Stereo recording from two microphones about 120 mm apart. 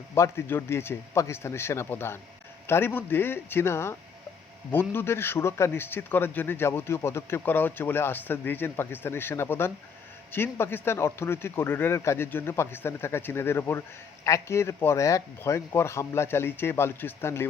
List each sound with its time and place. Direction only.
0.1 s a man's voice: 20° left (ahead or behind)